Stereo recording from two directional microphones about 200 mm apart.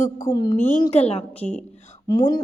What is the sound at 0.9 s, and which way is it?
Speech, 30° left (ahead or behind).